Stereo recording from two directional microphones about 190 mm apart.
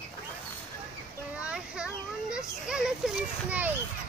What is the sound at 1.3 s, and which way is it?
A child's voice, 5° right (ahead or behind).